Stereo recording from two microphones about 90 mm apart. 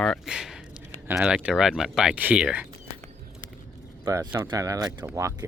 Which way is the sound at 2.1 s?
15° right (ahead or behind).